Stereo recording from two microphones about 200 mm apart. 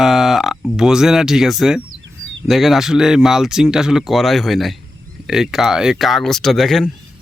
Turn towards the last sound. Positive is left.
turn(degrees=0)  # may be behind; listen again after turning